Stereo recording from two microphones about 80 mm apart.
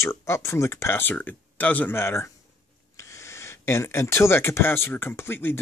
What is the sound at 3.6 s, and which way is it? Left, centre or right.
Speech, left.